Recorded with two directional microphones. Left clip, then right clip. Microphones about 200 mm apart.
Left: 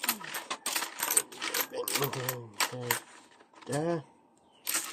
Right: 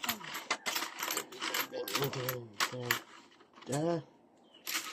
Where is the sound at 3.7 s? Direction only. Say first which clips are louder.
Left 2 dB; 55° left (ahead or behind).